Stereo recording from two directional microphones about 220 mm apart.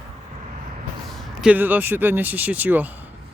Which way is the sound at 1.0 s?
5° right (ahead or behind).